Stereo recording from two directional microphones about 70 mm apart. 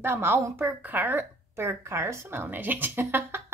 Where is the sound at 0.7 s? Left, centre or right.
Right.